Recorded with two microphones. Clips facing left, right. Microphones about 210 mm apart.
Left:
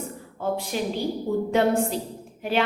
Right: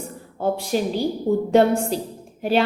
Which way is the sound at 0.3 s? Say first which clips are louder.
Right 5 dB; 35° right (ahead or behind).